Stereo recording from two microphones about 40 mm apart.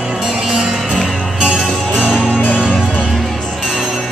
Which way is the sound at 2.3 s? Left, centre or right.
Left.